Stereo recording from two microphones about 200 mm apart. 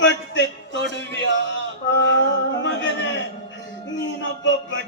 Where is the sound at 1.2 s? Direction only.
65° left (ahead or behind).